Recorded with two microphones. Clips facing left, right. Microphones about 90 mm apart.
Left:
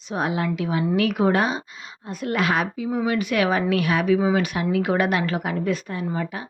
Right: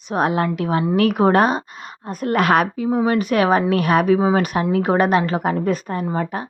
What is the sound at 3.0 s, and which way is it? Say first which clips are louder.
A woman's voice: right 4 dB; 40° right (ahead or behind).